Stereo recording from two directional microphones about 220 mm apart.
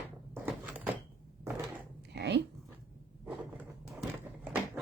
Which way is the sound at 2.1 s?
50° right (ahead or behind).